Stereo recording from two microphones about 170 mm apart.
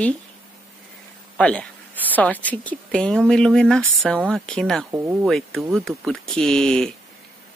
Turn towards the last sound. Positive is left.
turn(degrees=5)  # may be behind; listen again after turning